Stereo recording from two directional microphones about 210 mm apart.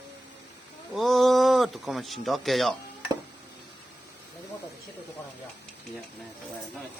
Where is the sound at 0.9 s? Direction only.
Centre (ahead or behind).